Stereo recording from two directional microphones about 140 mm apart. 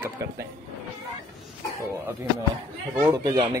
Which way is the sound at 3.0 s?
25° right (ahead or behind).